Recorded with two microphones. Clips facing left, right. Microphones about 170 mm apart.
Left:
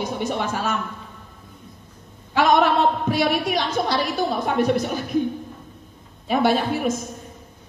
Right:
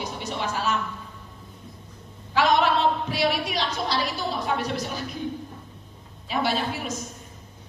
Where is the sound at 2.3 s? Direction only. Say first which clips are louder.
Left 4 dB; 50° left (ahead or behind).